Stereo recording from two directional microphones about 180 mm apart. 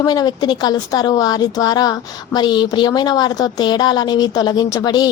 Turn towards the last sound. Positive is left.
turn(degrees=20)  # may be behind; listen again after turning